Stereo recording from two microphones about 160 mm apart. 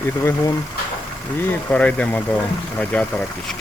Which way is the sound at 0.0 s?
15° left (ahead or behind).